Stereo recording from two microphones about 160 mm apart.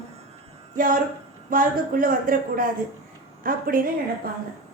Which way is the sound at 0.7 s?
60° right (ahead or behind).